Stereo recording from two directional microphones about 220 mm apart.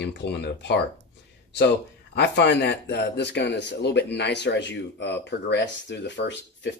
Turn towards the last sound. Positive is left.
turn(degrees=55)  # may be behind; listen again after turning